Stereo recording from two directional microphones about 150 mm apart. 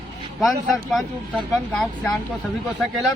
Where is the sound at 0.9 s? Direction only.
Centre (ahead or behind).